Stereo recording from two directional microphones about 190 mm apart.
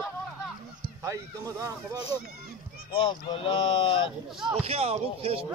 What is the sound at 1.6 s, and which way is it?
Speech, 20° right (ahead or behind).